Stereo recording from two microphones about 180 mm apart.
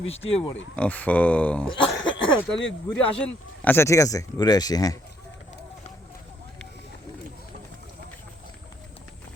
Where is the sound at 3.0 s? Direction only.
10° left (ahead or behind).